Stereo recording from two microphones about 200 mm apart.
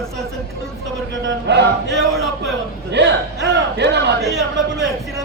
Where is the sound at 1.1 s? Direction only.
65° right (ahead or behind).